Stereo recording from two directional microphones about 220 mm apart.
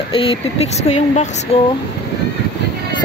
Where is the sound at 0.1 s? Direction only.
25° left (ahead or behind).